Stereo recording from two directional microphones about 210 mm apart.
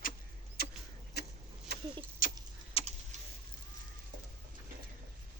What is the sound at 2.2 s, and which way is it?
Keys jangling, 40° left (ahead or behind).